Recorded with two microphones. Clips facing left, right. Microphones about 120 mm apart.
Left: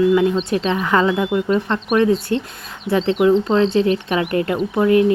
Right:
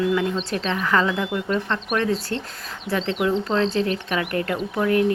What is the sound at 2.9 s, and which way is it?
Speech, 65° left (ahead or behind).